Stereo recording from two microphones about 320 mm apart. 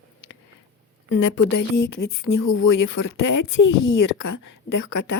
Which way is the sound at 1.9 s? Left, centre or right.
Left.